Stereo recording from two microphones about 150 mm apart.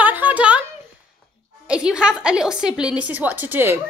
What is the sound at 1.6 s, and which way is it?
A woman's voice, 5° right (ahead or behind).